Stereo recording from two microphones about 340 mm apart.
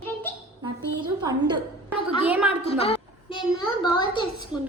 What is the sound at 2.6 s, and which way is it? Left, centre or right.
Child singing, centre.